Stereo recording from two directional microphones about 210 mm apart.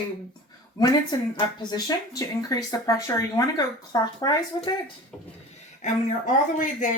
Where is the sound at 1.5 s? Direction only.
20° left (ahead or behind).